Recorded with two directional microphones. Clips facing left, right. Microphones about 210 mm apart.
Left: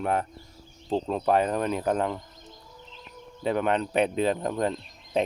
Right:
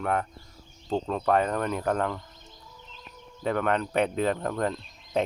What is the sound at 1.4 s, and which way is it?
Speech, 20° left (ahead or behind).